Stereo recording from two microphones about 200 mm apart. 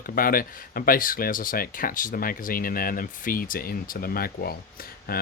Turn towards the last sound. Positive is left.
turn(degrees=50)  # may be behind; listen again after turning